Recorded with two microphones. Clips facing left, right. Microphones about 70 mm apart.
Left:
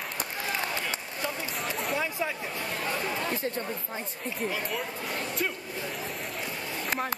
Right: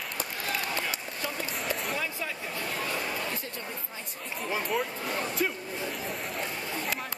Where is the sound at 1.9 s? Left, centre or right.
Centre.